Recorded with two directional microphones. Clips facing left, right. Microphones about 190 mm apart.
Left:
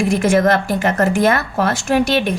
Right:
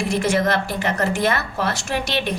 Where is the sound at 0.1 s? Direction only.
50° left (ahead or behind).